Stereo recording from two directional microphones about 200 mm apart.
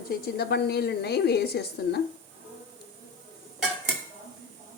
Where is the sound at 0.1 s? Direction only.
55° left (ahead or behind).